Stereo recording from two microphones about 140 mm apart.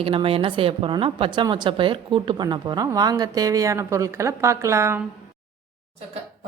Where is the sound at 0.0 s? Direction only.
40° right (ahead or behind); by 5.0 s 20° right (ahead or behind).